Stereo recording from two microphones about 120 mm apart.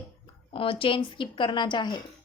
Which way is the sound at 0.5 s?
50° left (ahead or behind).